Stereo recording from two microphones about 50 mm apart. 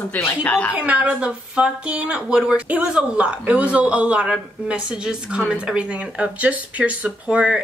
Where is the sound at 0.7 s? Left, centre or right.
Right.